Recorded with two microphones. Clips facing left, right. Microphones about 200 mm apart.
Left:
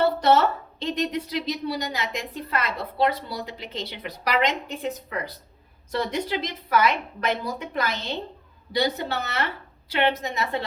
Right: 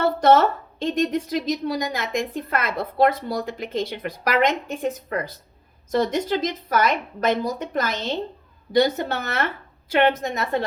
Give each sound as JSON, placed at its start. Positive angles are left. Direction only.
{"t": 0.0, "sound": "a woman's voice", "side_deg": -50}